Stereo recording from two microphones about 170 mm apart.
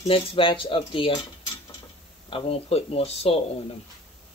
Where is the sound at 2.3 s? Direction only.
35° left (ahead or behind).